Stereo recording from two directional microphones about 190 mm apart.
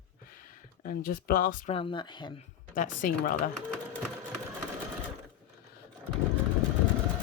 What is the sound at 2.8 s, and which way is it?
Speech, 45° left (ahead or behind).